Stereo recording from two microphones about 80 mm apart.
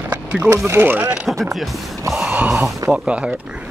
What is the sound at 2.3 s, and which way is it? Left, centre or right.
Speech, centre.